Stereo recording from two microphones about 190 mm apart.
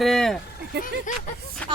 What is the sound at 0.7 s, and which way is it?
Speech, 60° right (ahead or behind).